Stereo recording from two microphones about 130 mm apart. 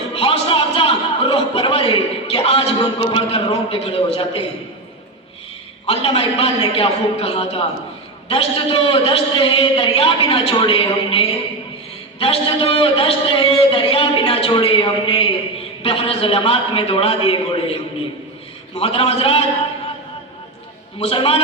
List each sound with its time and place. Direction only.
0.1 s music: 45° left (ahead or behind)
5.8 s a man's voice: 45° left (ahead or behind)
18.8 s a man's voice: 50° left (ahead or behind)
21.0 s a man's voice: 45° left (ahead or behind)